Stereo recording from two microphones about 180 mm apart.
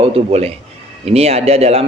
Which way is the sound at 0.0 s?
30° right (ahead or behind).